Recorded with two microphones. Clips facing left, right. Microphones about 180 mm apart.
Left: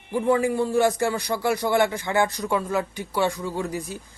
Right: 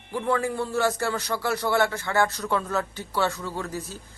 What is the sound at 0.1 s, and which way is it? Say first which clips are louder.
A man's voice: left 5 dB; 15° left (ahead or behind).